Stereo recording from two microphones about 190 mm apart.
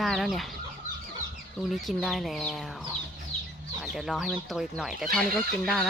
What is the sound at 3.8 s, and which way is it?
Speech, centre (ahead or behind).